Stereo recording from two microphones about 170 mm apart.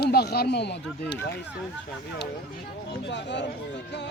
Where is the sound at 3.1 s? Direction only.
90° left.